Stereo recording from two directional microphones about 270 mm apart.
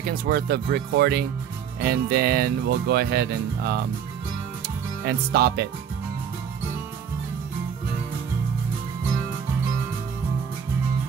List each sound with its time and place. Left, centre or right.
0.0 s speech: right
5.0 s speech: right